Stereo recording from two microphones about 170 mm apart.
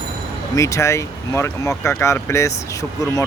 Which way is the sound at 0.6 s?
15° left (ahead or behind).